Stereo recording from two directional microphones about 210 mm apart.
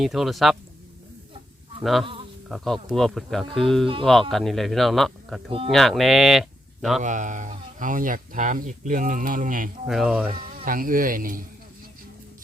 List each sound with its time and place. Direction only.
0.0 s speech: centre (ahead or behind)
1.8 s speech: centre (ahead or behind)
7.0 s speech: 35° right (ahead or behind)
9.8 s speech: centre (ahead or behind)
10.5 s speech: 40° right (ahead or behind)